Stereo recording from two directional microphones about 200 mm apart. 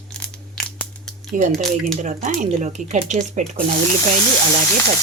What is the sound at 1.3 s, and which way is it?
Speech, 40° right (ahead or behind).